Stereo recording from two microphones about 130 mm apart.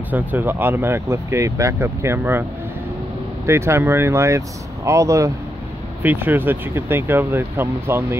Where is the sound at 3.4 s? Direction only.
20° right (ahead or behind).